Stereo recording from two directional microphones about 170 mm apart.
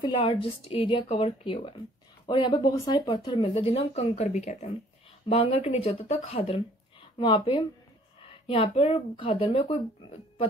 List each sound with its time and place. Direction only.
0.0 s speech: 30° left (ahead or behind)